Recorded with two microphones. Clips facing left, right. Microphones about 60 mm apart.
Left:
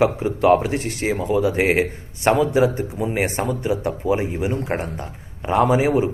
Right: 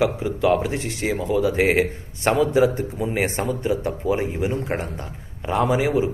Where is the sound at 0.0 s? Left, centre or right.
Left.